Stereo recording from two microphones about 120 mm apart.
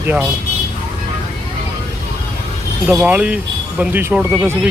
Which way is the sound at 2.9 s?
10° right (ahead or behind).